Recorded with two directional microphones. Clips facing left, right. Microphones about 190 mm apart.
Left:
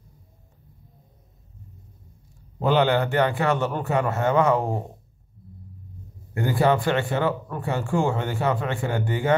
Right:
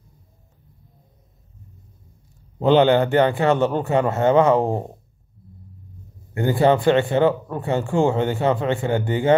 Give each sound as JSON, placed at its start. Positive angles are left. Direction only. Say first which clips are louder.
{"t": 2.6, "sound": "speech", "louder": "right 5 dB", "side_deg": -25}
{"t": 6.3, "sound": "speech", "louder": "right 4 dB", "side_deg": -25}